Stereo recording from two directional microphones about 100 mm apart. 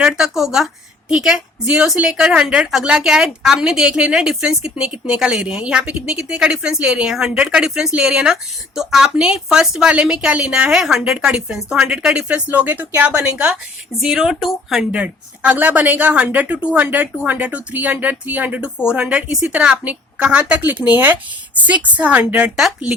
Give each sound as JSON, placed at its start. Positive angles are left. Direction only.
{"t": 0.0, "sound": "a woman's voice", "side_deg": -5}
{"t": 14.0, "sound": "a woman's voice", "side_deg": -5}
{"t": 14.9, "sound": "a woman's voice", "side_deg": -15}